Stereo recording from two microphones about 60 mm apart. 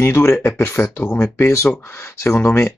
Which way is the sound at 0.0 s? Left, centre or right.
Left.